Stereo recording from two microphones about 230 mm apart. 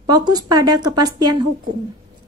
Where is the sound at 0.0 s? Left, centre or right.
Centre.